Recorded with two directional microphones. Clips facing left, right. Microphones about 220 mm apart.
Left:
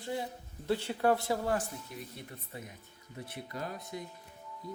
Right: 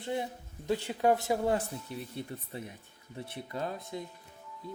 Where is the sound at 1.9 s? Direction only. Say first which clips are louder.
Right 6 dB; 30° right (ahead or behind).